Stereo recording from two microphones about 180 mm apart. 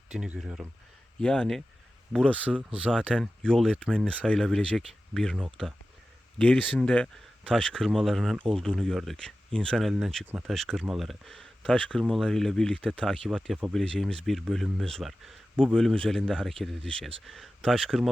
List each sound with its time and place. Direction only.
0.1 s speech: 5° right (ahead or behind)
2.5 s speech: 5° right (ahead or behind)
2.9 s speech: 5° left (ahead or behind)